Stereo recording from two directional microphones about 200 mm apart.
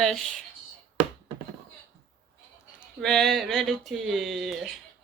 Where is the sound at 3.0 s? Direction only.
Centre (ahead or behind).